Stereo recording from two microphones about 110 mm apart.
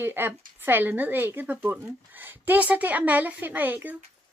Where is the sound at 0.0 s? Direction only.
20° right (ahead or behind).